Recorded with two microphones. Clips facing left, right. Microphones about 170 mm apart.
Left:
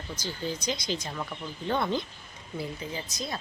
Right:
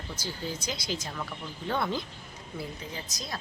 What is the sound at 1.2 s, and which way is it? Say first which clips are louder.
Speech: left 2 dB; 15° left (ahead or behind).